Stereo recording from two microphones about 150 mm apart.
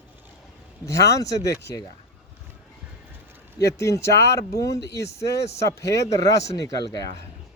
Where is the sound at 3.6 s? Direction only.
20° left (ahead or behind).